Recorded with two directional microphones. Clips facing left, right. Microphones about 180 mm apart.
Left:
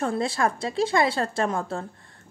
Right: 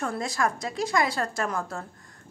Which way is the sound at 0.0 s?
30° left (ahead or behind).